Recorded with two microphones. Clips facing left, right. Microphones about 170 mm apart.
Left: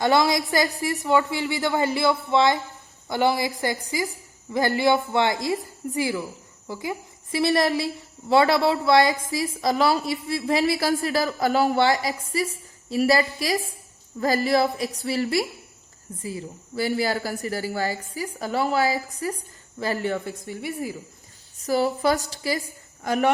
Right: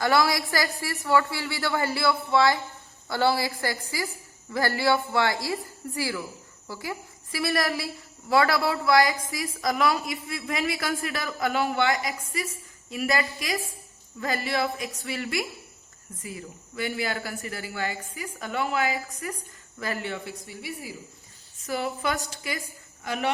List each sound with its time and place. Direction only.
0.0 s a woman's voice: 20° left (ahead or behind); by 20.9 s 50° left (ahead or behind)
21.6 s a woman's voice: 40° left (ahead or behind)
23.0 s speech: 45° left (ahead or behind)